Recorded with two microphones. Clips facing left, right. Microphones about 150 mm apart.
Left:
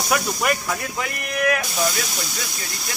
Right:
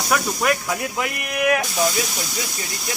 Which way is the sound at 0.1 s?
Centre (ahead or behind).